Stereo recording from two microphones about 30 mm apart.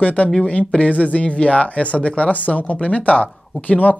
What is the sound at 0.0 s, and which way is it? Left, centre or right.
Speech, left.